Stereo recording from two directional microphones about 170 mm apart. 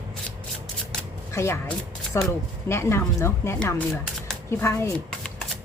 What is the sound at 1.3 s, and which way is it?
Speech, 15° left (ahead or behind).